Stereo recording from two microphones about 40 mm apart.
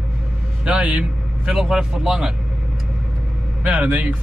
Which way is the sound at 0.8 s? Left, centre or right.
Right.